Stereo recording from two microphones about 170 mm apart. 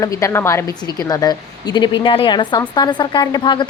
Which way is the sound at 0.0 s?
15° left (ahead or behind).